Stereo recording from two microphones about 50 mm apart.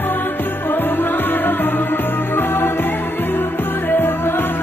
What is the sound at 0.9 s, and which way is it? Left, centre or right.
Music, left.